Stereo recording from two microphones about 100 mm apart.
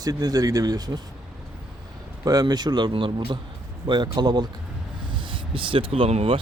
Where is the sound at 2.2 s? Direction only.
40° right (ahead or behind).